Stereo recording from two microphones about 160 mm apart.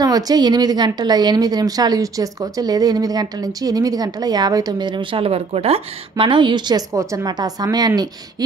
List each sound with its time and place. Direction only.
0.0 s a woman's voice: 25° right (ahead or behind)